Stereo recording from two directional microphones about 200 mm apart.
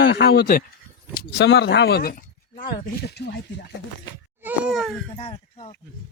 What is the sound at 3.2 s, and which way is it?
Speech, 55° left (ahead or behind).